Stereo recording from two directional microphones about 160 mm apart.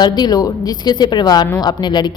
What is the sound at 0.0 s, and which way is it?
A woman's voice, 25° left (ahead or behind).